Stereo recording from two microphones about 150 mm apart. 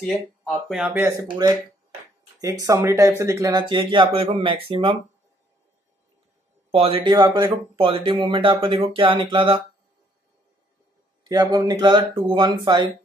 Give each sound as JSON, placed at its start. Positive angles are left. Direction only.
{"t": 0.0, "sound": "speech", "side_deg": 0}
{"t": 2.6, "sound": "speech", "side_deg": -20}
{"t": 6.7, "sound": "speech", "side_deg": -40}
{"t": 11.2, "sound": "speech", "side_deg": -25}